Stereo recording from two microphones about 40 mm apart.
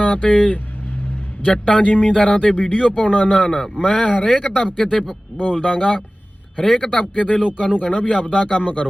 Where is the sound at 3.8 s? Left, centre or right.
Left.